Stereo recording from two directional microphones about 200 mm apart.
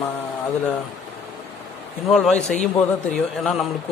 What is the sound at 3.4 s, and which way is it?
Speech, centre (ahead or behind).